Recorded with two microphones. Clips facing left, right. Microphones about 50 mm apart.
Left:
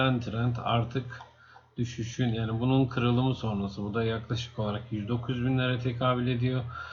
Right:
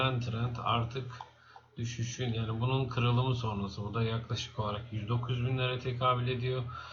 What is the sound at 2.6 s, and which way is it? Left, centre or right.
Speech, centre.